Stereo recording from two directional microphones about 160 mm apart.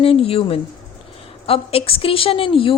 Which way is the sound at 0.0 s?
35° left (ahead or behind).